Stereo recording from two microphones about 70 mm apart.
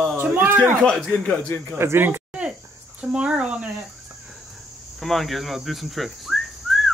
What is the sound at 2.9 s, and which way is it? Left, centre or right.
Speech, centre.